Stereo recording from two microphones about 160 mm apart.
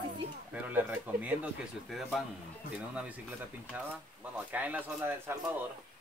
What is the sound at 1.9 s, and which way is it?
Speech, centre (ahead or behind).